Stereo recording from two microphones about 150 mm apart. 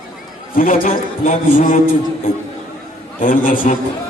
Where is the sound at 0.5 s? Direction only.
70° left (ahead or behind).